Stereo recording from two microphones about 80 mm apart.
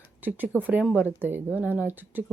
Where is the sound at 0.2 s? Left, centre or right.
Right.